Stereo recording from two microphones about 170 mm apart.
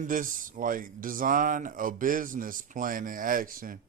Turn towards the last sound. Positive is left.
turn(degrees=-55)  # may be behind; listen again after turning